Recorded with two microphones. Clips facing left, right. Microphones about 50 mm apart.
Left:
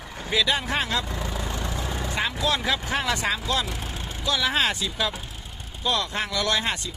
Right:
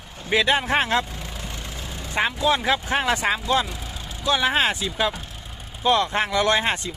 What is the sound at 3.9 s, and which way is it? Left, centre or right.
Vehicle, left.